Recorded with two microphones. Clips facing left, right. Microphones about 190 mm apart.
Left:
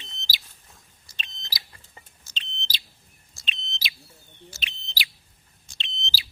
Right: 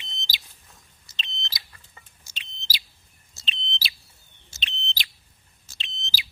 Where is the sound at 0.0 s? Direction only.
15° right (ahead or behind).